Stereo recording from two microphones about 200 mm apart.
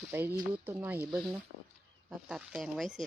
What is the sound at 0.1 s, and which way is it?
Speech, 10° right (ahead or behind).